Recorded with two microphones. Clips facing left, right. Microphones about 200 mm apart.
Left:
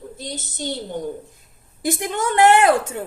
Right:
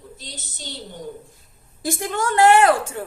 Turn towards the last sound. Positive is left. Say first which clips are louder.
# even
turn(degrees=20)  # may be behind; listen again after turning